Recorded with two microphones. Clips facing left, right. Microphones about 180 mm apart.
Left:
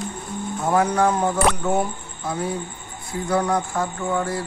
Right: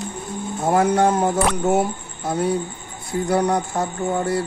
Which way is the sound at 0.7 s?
45° right (ahead or behind).